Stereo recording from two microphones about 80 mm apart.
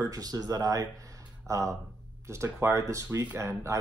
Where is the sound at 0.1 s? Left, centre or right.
Right.